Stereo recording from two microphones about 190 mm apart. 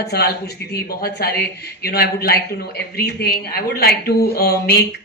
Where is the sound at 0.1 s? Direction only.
55° left (ahead or behind).